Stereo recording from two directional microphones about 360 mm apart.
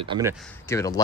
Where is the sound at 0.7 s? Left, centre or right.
Centre.